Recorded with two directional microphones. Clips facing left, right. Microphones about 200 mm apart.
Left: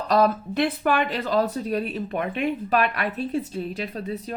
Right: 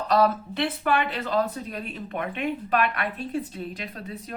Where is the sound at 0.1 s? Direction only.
45° left (ahead or behind).